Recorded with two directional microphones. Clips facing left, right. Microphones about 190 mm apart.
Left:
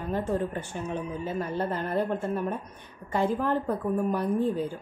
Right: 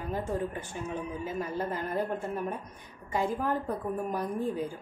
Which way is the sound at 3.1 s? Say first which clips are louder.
Left 4 dB; 60° left (ahead or behind).